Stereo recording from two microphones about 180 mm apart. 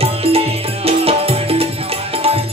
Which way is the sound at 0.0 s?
35° right (ahead or behind).